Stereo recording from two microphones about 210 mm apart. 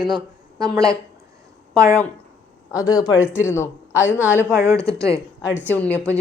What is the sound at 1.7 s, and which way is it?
Speech, 15° right (ahead or behind).